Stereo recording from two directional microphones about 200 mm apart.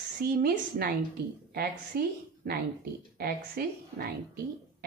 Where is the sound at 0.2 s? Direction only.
50° right (ahead or behind).